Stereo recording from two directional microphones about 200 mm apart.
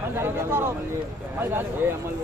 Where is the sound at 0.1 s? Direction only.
10° right (ahead or behind).